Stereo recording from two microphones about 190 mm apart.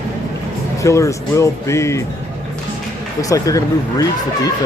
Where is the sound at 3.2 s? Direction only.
20° left (ahead or behind).